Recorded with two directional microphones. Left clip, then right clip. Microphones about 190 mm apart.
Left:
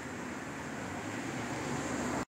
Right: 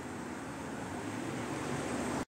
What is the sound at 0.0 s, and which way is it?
Vehicle, 50° left (ahead or behind).